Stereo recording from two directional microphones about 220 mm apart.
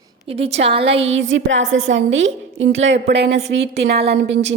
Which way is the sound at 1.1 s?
60° right (ahead or behind).